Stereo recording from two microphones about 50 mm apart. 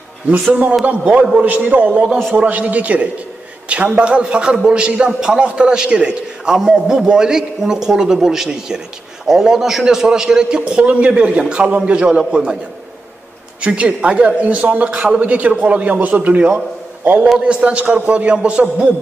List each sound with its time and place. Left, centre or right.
0.3 s a man's voice: right; by 10.6 s centre
10.7 s a man's voice: right
13.6 s a man's voice: right